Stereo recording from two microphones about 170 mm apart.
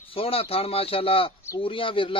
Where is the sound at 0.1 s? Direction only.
35° left (ahead or behind).